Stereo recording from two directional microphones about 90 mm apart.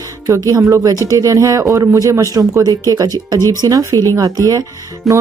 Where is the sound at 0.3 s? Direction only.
40° right (ahead or behind).